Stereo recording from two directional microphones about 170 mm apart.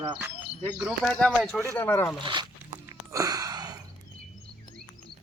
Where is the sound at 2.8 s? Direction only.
20° right (ahead or behind).